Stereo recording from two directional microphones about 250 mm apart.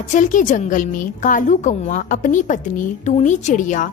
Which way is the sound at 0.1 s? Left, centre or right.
Left.